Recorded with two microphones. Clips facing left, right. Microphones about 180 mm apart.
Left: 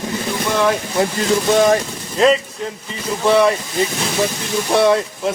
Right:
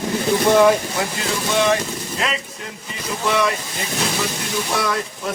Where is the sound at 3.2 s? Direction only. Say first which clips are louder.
Left 7 dB; 30° left (ahead or behind).